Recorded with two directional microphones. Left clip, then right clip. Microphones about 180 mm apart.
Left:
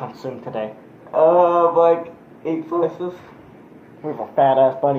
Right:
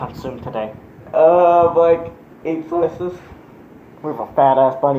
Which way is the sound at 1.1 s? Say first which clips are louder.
Right 3 dB; 15° left (ahead or behind).